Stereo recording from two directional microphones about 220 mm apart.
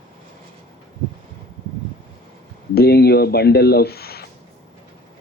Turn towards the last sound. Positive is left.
turn(degrees=45)  # may be behind; listen again after turning